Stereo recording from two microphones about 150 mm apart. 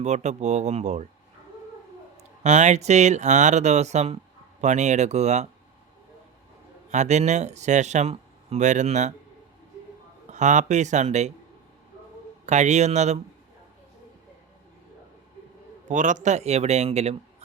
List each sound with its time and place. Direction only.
0.0 s speech: 50° right (ahead or behind)
2.4 s speech: 50° right (ahead or behind)
6.9 s speech: 50° right (ahead or behind)
10.2 s speech: 55° right (ahead or behind)
12.5 s speech: 50° right (ahead or behind)
15.9 s speech: 60° right (ahead or behind)